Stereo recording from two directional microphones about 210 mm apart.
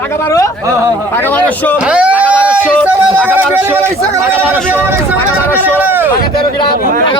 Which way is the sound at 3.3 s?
10° right (ahead or behind).